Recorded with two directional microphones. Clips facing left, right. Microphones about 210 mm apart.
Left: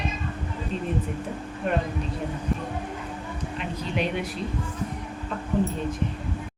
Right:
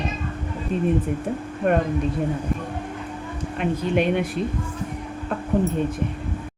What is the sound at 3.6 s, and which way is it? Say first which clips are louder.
Speech: right 8 dB; 55° right (ahead or behind).